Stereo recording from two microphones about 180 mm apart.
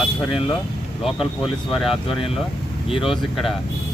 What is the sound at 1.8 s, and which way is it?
Speech, centre (ahead or behind).